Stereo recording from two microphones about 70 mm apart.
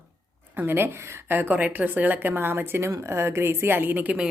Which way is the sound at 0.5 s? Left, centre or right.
Right.